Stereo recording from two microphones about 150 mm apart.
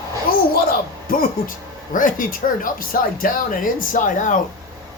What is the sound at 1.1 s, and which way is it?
Speech, 70° left (ahead or behind).